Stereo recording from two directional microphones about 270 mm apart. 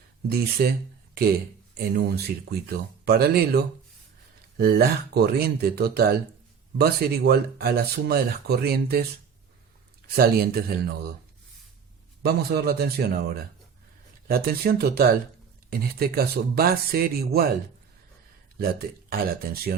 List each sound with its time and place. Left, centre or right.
0.3 s speech: right
2.0 s speech: right
10.2 s speech: right
12.2 s speech: right
18.6 s speech: right